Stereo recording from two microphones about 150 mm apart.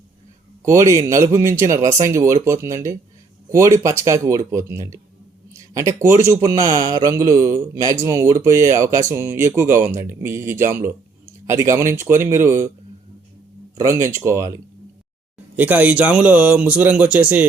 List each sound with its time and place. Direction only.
0.6 s speech: 20° right (ahead or behind)
13.8 s speech: 20° right (ahead or behind)
15.5 s speech: 10° right (ahead or behind)